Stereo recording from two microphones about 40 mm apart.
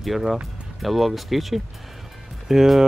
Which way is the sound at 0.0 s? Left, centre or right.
Centre.